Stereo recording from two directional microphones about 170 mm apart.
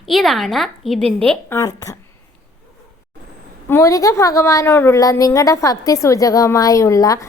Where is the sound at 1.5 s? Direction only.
20° left (ahead or behind).